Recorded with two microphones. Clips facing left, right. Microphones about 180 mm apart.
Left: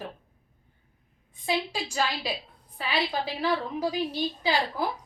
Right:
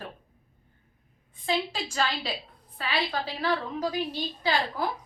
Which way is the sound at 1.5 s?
15° left (ahead or behind).